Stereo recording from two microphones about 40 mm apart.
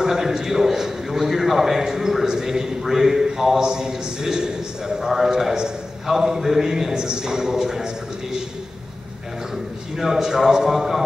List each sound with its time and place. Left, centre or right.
0.2 s a man's voice: centre
9.9 s a man's voice: centre